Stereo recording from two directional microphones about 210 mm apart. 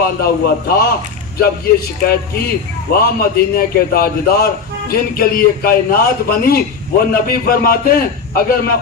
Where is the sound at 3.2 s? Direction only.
45° left (ahead or behind).